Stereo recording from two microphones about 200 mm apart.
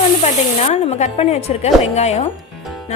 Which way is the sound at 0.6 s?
35° left (ahead or behind).